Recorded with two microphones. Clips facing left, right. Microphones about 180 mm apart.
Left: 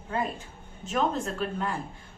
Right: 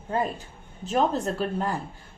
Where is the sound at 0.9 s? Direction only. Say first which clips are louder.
Right 4 dB; 35° right (ahead or behind).